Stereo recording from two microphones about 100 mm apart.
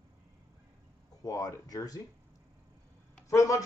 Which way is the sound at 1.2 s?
35° left (ahead or behind).